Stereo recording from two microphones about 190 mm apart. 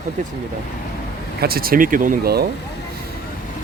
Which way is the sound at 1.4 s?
55° right (ahead or behind).